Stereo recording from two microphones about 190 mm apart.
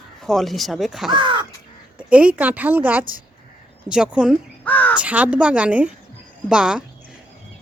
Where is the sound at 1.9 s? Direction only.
5° right (ahead or behind).